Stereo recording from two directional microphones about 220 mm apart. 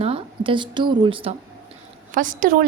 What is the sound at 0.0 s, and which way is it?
A woman's voice, 25° right (ahead or behind).